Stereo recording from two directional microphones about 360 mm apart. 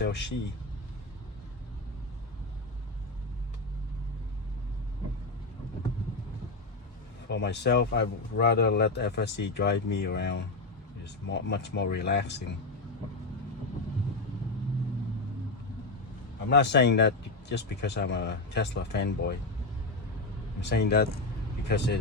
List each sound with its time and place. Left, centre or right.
0.0 s speech: left
7.3 s speech: left
16.5 s speech: left
20.6 s speech: left